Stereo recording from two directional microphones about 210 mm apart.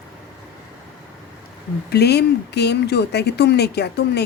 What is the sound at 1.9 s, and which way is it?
Speech, 50° left (ahead or behind).